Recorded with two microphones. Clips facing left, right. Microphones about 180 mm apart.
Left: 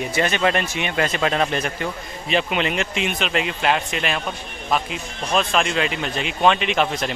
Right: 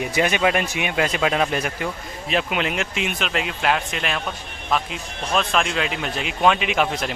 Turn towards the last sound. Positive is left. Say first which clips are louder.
# left 1 dB
turn(degrees=-5)  # may be behind; listen again after turning